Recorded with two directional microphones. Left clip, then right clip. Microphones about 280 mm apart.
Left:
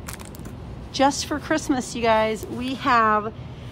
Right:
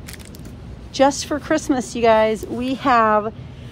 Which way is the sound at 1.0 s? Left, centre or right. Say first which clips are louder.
Right 4 dB; centre.